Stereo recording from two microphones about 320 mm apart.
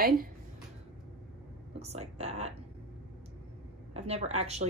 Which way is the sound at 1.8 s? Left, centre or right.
Centre.